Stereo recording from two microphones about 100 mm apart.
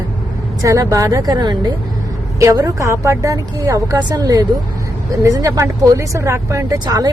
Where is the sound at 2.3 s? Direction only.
35° right (ahead or behind).